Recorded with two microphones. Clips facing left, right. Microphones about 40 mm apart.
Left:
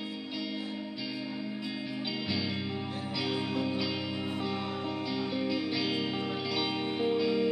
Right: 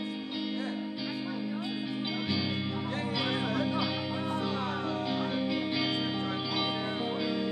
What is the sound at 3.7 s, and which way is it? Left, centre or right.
Music, right.